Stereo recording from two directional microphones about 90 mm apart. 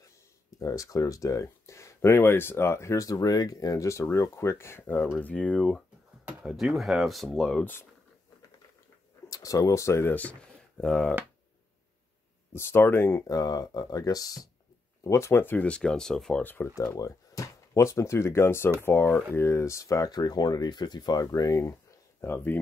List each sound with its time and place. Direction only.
0.6 s speech: 40° left (ahead or behind); by 5.7 s 15° left (ahead or behind)
6.4 s speech: centre (ahead or behind)
9.3 s speech: 40° left (ahead or behind)
10.8 s speech: 10° left (ahead or behind)
12.5 s speech: 30° left (ahead or behind)
13.3 s speech: 45° left (ahead or behind)
15.0 s speech: 30° left (ahead or behind); by 16.4 s 10° left (ahead or behind)
16.4 s speech: 25° left (ahead or behind)
17.0 s speech: 35° left (ahead or behind)
22.2 s speech: 25° left (ahead or behind)